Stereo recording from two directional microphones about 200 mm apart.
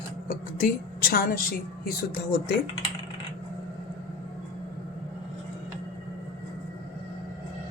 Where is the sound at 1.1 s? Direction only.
45° left (ahead or behind).